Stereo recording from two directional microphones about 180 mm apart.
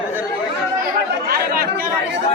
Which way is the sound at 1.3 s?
55° right (ahead or behind).